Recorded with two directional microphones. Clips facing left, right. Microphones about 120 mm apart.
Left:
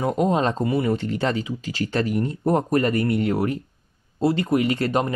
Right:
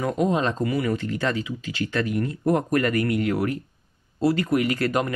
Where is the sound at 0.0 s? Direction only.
35° left (ahead or behind).